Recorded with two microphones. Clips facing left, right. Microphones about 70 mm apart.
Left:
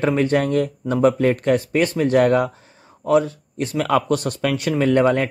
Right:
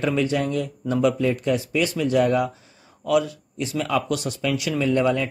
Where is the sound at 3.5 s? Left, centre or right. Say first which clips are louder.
Left 4 dB; left.